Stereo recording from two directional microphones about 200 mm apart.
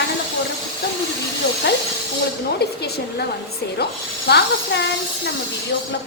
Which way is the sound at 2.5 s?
55° left (ahead or behind).